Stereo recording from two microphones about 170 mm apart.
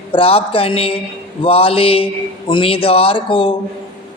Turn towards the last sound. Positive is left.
turn(degrees=30)  # may be behind; listen again after turning